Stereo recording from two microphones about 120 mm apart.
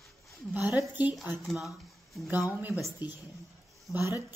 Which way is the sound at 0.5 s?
20° right (ahead or behind).